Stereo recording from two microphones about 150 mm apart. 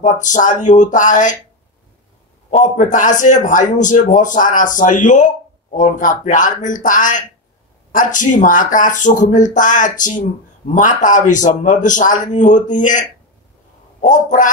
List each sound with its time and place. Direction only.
0.0 s a man's voice: 55° left (ahead or behind)
2.6 s a man's voice: 55° left (ahead or behind)
14.0 s a man's voice: 60° left (ahead or behind)